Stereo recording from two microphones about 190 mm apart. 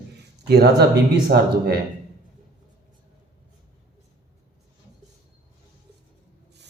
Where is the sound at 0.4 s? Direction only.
60° right (ahead or behind).